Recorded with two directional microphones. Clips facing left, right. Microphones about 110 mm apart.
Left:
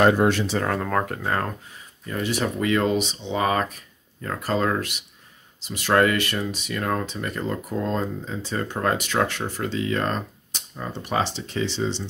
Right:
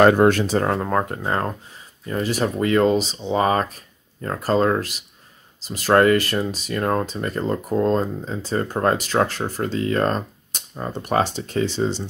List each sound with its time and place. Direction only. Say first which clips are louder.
0.0 s speech: right 4 dB; 60° right (ahead or behind)
0.7 s speech: right 3 dB; 25° right (ahead or behind); by 12.0 s 45° right (ahead or behind)